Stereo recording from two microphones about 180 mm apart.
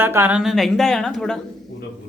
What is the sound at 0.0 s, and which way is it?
A woman's voice, 10° right (ahead or behind).